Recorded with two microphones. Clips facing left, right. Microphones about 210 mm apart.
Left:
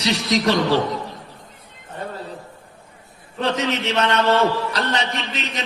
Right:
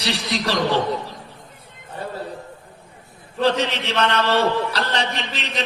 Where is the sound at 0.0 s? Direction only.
30° right (ahead or behind).